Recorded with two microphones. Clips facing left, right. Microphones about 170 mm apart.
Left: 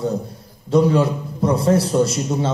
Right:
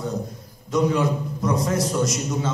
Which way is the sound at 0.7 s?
30° left (ahead or behind).